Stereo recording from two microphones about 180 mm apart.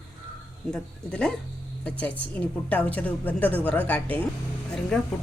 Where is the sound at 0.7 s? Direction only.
5° left (ahead or behind).